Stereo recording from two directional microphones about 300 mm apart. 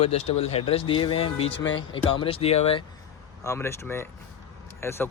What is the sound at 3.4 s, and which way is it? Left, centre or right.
Speech, centre.